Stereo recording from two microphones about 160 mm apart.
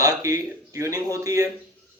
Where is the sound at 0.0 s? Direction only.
20° right (ahead or behind).